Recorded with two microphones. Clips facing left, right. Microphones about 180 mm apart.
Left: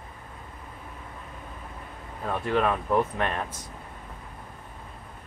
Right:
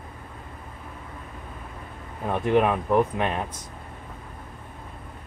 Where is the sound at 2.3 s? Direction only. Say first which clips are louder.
Right 4 dB; 15° right (ahead or behind).